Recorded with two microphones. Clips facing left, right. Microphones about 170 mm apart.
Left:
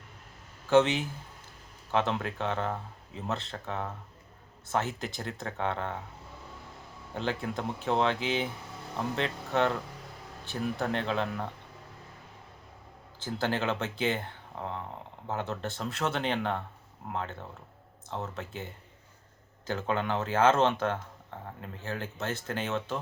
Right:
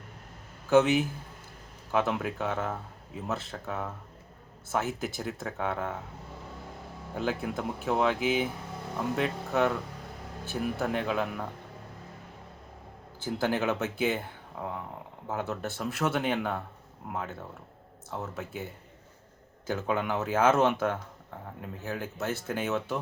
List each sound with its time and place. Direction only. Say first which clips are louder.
0.7 s speech: right 1 dB; 5° right (ahead or behind)
7.2 s speech: right 1 dB; 5° right (ahead or behind)
13.2 s speech: right 2 dB; 10° right (ahead or behind)
15.3 s speech: right 1 dB; 5° right (ahead or behind)